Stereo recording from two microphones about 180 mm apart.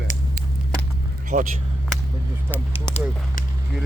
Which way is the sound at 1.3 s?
40° right (ahead or behind).